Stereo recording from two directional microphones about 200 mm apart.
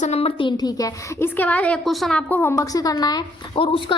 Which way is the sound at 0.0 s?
30° left (ahead or behind).